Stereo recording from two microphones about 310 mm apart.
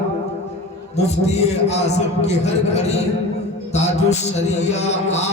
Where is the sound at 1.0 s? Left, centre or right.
Left.